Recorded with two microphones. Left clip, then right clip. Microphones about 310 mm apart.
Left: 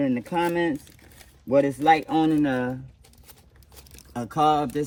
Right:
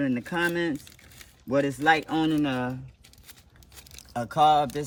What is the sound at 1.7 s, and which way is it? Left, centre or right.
Speech, centre.